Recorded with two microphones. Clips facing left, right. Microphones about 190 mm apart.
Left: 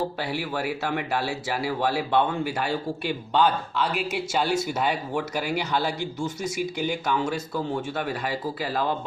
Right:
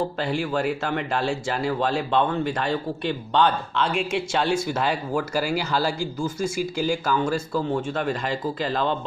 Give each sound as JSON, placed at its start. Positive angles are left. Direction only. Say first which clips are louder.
{"t": 0.2, "sound": "speech", "louder": "right 4 dB", "side_deg": 5}
{"t": 6.6, "sound": "speech", "louder": "right 2 dB", "side_deg": 65}
{"t": 7.5, "sound": "speech", "louder": "right 3 dB", "side_deg": 5}